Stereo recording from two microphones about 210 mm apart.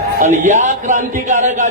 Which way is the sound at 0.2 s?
35° right (ahead or behind).